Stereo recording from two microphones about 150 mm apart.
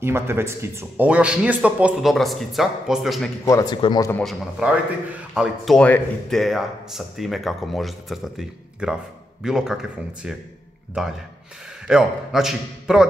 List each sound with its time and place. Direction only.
0.0 s speech: 15° right (ahead or behind); by 3.3 s centre (ahead or behind)
3.4 s speech: 25° left (ahead or behind)
4.2 s speech: 5° right (ahead or behind)